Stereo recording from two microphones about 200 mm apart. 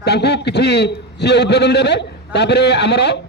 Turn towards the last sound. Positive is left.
turn(degrees=55)  # may be behind; listen again after turning